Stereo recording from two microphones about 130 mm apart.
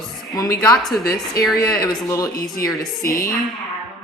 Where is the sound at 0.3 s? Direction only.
30° left (ahead or behind).